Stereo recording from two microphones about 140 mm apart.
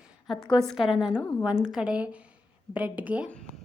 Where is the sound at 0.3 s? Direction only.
35° left (ahead or behind).